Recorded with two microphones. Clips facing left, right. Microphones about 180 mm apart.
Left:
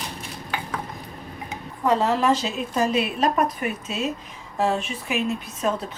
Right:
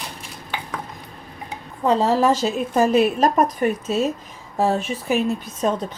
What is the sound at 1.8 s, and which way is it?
Speech, 35° right (ahead or behind).